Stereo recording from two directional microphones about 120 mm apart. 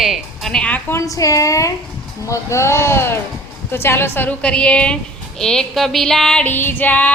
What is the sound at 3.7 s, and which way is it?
Female singing, 20° left (ahead or behind).